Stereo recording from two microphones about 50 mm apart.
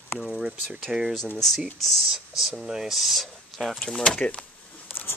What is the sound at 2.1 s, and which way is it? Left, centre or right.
Speech, centre.